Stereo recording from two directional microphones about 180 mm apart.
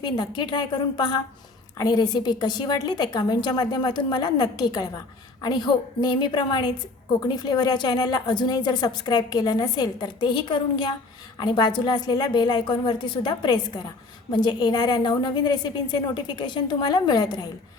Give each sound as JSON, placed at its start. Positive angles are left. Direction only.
{"t": 0.0, "sound": "a woman's voice", "side_deg": 25}